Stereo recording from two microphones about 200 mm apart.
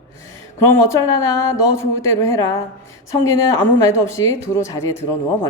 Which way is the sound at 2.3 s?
15° left (ahead or behind).